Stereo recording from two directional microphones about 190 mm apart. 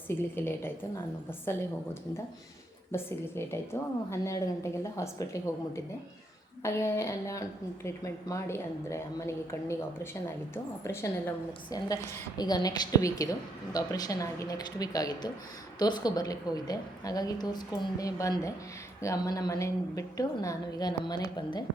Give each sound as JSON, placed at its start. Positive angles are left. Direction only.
{"t": 0.3, "sound": "a woman's voice", "side_deg": 10}